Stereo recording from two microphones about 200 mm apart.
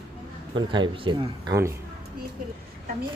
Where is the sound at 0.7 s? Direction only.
25° right (ahead or behind).